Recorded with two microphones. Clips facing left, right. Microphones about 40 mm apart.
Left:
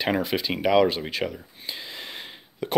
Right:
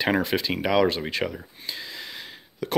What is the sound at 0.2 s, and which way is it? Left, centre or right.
Speech, centre.